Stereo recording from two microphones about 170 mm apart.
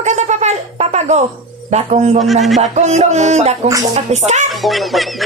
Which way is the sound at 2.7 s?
40° right (ahead or behind).